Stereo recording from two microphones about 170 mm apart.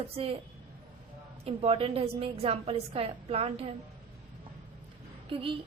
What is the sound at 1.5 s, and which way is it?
A woman's voice, 35° right (ahead or behind).